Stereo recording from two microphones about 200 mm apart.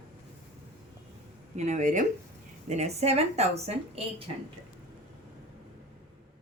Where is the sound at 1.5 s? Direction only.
35° right (ahead or behind).